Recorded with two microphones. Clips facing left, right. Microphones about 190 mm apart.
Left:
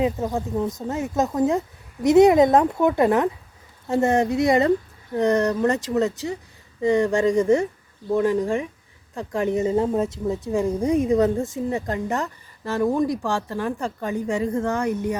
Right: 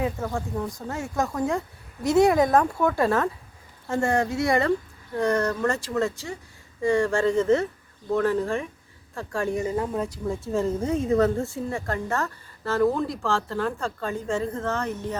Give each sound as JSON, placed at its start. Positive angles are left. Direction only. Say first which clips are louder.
{"t": 0.0, "sound": "a woman's voice", "louder": "left 5 dB", "side_deg": 20}